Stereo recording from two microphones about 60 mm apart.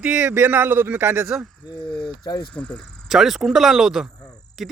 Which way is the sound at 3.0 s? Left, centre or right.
Centre.